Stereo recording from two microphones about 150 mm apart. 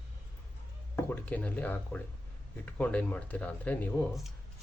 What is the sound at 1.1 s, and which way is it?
Speech, 10° left (ahead or behind).